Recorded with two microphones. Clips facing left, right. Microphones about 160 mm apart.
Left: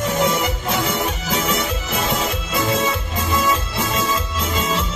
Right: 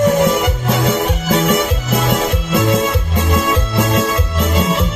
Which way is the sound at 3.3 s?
70° right (ahead or behind).